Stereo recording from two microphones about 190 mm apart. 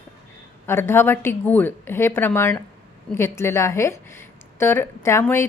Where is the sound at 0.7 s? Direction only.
10° left (ahead or behind).